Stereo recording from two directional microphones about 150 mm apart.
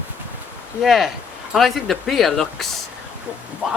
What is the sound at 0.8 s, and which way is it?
Speech, centre (ahead or behind).